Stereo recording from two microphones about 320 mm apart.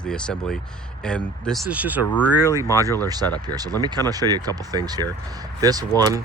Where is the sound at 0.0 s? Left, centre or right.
Centre.